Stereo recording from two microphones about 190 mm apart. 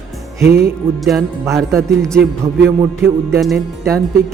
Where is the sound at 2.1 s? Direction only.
Centre (ahead or behind).